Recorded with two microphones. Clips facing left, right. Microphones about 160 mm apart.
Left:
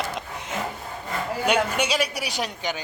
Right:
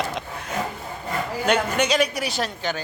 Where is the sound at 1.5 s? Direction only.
10° left (ahead or behind).